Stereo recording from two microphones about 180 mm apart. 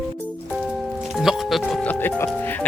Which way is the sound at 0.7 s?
Centre (ahead or behind).